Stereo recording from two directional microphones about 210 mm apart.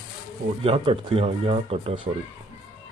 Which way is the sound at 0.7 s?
25° right (ahead or behind).